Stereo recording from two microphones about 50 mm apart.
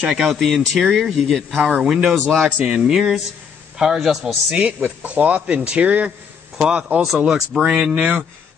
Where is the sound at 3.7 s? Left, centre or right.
Centre.